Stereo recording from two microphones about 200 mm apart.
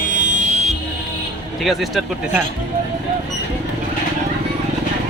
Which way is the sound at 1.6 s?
Centre (ahead or behind).